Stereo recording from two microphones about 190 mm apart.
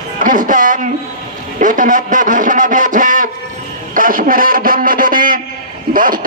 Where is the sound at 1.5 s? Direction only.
45° right (ahead or behind).